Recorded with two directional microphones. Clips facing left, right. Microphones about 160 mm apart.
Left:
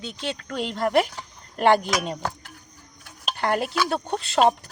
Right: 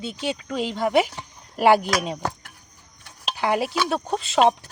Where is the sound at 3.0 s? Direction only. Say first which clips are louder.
Right 1 dB; centre (ahead or behind).